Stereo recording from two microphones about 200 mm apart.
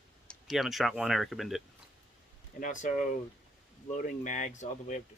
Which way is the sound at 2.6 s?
40° left (ahead or behind).